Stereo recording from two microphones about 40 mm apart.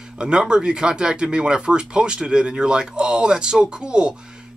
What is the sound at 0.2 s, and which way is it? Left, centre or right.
Speech, right.